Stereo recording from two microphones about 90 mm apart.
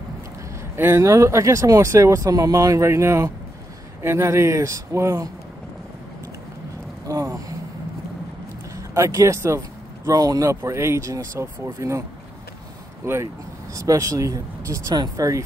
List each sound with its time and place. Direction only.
0.7 s speech: 30° right (ahead or behind)
7.1 s a sound: 40° right (ahead or behind)
8.7 s speech: 35° right (ahead or behind)
13.0 s speech: 30° right (ahead or behind)